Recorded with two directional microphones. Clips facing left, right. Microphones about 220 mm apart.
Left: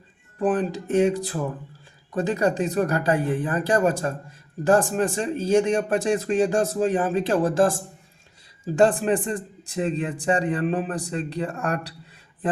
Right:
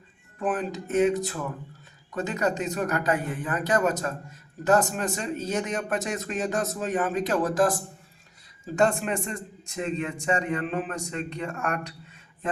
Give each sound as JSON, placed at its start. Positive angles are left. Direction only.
{"t": 0.3, "sound": "speech", "side_deg": 35}